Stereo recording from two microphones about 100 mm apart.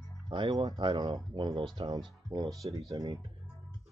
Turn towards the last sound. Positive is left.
turn(degrees=-35)  # may be behind; listen again after turning